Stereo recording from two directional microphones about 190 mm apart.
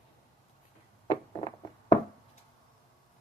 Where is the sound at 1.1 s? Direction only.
25° left (ahead or behind).